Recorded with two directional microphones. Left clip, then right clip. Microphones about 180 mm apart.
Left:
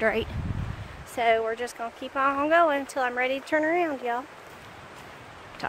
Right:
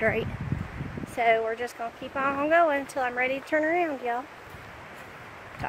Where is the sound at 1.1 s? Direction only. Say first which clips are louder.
Even; 15° left (ahead or behind).